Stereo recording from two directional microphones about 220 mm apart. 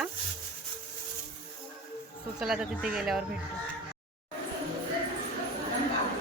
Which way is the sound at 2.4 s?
5° right (ahead or behind).